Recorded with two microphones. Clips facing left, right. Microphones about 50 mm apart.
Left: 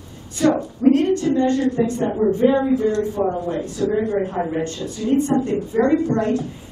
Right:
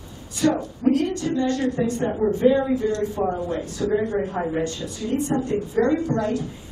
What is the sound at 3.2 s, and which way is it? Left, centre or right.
Speech, centre.